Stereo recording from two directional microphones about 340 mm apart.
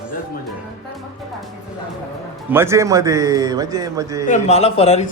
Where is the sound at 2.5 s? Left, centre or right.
Centre.